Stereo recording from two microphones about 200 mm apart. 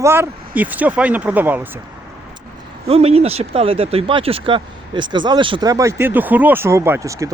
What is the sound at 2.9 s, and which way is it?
Speech, 30° right (ahead or behind).